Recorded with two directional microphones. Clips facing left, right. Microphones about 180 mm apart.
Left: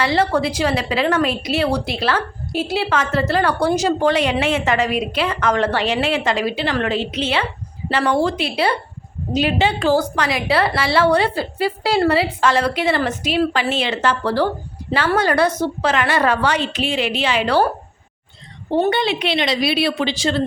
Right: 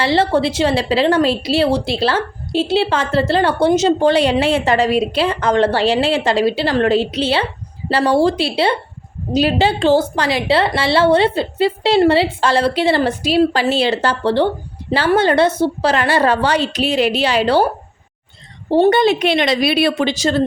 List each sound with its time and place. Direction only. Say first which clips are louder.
0.0 s a woman's voice: right 3 dB; 30° right (ahead or behind)
18.7 s a woman's voice: right 6 dB; 40° right (ahead or behind)